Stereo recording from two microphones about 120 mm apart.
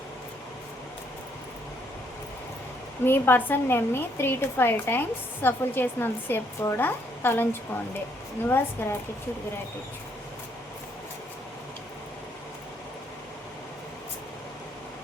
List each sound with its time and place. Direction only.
3.0 s speech: 15° left (ahead or behind)
8.4 s speech: 15° left (ahead or behind)